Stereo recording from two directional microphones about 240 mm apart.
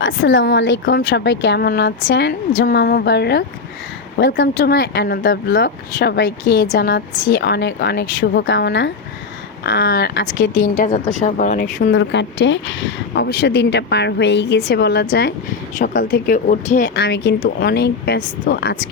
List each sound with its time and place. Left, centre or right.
0.0 s speech: left
4.5 s speech: left
11.6 s speech: left
15.8 s speech: left
16.9 s speech: left